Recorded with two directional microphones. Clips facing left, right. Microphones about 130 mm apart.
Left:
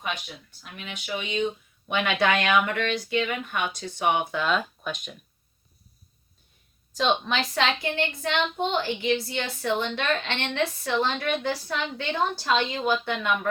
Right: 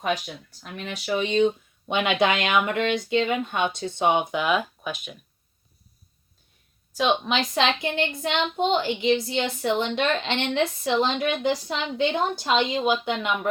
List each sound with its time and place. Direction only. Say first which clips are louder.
0.0 s speech: right 7 dB; 40° right (ahead or behind)
1.9 s speech: right 2 dB; 20° right (ahead or behind); by 5.1 s 5° right (ahead or behind)
6.9 s speech: right 2 dB; 10° right (ahead or behind)